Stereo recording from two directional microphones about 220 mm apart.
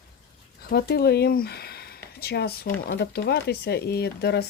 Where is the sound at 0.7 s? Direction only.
45° left (ahead or behind).